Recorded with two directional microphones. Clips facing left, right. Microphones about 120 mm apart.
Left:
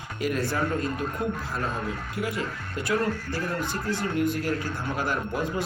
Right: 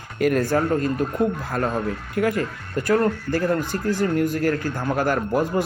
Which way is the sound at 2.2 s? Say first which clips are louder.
Right 9 dB; 50° right (ahead or behind).